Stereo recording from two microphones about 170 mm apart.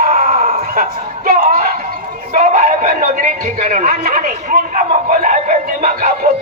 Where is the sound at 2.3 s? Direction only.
45° right (ahead or behind).